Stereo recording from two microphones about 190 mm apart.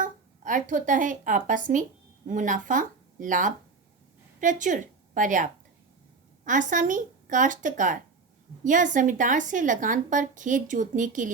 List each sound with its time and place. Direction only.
0.0 s a woman's voice: 45° right (ahead or behind)